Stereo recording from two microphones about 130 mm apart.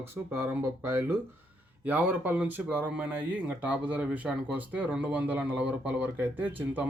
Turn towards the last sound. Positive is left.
turn(degrees=-15)  # may be behind; listen again after turning